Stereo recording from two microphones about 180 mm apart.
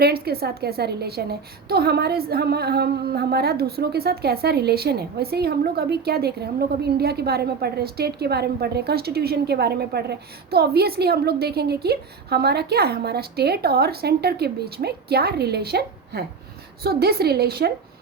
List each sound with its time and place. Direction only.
0.0 s a woman's voice: 60° right (ahead or behind)